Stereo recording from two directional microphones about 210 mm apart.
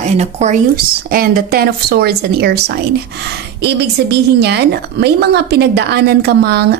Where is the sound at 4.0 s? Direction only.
50° right (ahead or behind).